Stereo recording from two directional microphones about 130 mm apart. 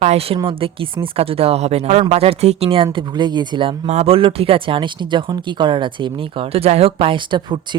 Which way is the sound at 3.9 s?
50° right (ahead or behind).